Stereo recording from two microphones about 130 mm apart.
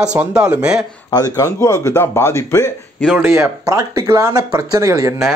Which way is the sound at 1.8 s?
20° left (ahead or behind).